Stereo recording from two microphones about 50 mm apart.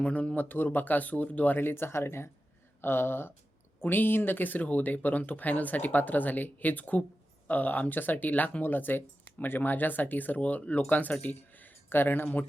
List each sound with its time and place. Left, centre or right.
0.0 s speech: left
0.4 s speech: left